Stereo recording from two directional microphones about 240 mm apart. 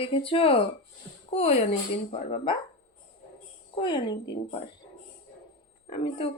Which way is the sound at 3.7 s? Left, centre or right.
Centre.